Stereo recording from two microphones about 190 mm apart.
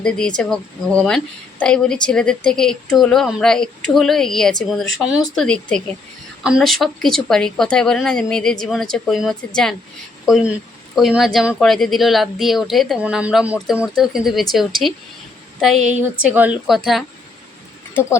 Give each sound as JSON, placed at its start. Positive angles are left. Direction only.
{"t": 0.0, "sound": "speech", "side_deg": 5}